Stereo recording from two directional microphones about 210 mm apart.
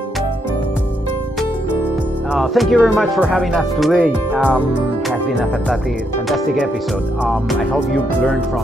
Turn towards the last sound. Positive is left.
turn(degrees=0)  # may be behind; listen again after turning